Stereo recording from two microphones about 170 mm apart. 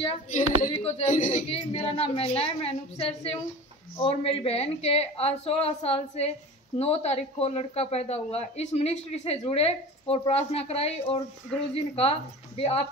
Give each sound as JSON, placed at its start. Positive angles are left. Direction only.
{"t": 0.0, "sound": "a man's voice", "side_deg": 40}